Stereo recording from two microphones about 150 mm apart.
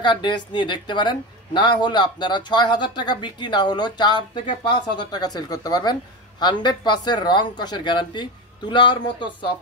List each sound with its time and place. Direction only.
0.0 s a woman's voice: 30° left (ahead or behind)